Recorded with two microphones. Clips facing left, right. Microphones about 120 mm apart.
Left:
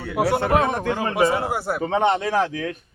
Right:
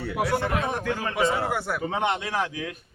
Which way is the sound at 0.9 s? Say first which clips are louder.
Left 5 dB; 20° left (ahead or behind).